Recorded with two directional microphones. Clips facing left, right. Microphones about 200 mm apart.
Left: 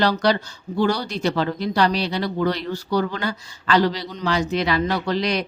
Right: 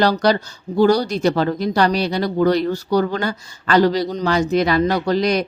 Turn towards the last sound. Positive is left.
turn(degrees=-45)  # may be behind; listen again after turning